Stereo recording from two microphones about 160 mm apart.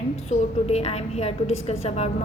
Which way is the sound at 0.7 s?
40° left (ahead or behind).